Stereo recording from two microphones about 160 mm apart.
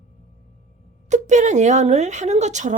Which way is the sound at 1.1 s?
50° right (ahead or behind).